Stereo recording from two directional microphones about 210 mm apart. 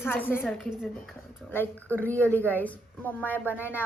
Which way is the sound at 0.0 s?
10° left (ahead or behind).